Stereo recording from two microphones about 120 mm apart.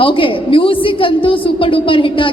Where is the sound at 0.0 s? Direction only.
45° left (ahead or behind).